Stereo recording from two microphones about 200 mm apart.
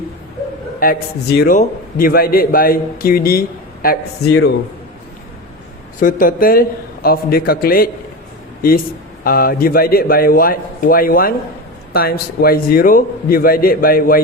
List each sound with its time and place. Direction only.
0.8 s a man's voice: 50° left (ahead or behind)
6.0 s a man's voice: 45° left (ahead or behind)
9.2 s a man's voice: 45° left (ahead or behind)